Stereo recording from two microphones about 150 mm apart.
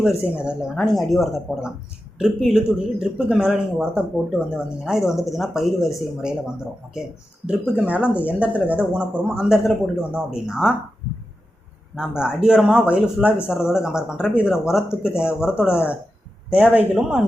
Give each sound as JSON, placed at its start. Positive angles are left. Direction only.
{"t": 0.0, "sound": "speech", "side_deg": -5}
{"t": 11.9, "sound": "speech", "side_deg": -5}